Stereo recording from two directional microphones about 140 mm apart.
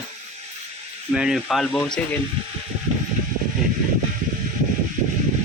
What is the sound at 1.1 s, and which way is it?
Speech, 5° right (ahead or behind).